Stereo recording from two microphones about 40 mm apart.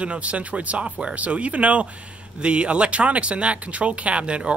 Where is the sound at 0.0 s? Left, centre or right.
Right.